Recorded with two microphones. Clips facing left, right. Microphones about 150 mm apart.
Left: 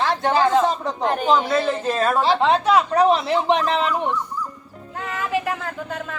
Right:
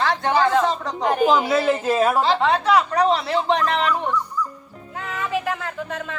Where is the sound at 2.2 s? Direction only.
20° left (ahead or behind).